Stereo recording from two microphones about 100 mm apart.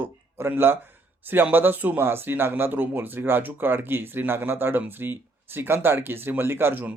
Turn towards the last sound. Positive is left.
turn(degrees=-15)  # may be behind; listen again after turning